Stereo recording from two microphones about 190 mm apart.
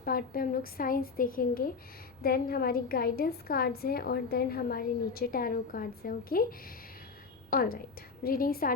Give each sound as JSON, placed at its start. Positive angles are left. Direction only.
{"t": 0.0, "sound": "a woman's voice", "side_deg": 50}
{"t": 7.5, "sound": "a woman's voice", "side_deg": 50}